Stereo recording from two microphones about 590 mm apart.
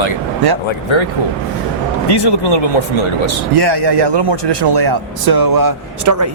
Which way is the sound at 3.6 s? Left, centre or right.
Right.